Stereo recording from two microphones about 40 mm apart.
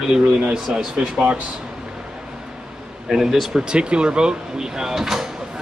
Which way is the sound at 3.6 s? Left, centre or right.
Right.